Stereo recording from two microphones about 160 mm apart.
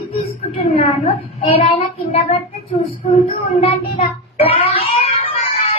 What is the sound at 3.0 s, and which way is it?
Child singing, 45° left (ahead or behind).